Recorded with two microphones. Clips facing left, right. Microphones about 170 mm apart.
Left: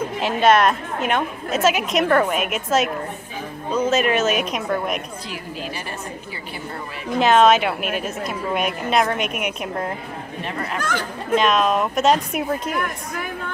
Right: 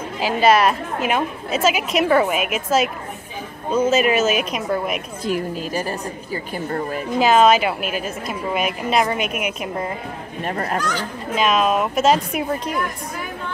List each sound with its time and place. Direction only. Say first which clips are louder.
0.2 s a woman's voice: right 1 dB; centre (ahead or behind)
5.2 s a woman's voice: right 8 dB; 45° right (ahead or behind)
7.2 s a woman's voice: even; 5° right (ahead or behind)
10.4 s a woman's voice: right 5 dB; 45° right (ahead or behind)
10.8 s speech: right 1 dB; 50° left (ahead or behind)
11.3 s a woman's voice: even; 5° right (ahead or behind)